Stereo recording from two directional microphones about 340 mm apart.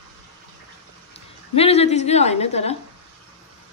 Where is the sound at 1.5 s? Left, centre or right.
Centre.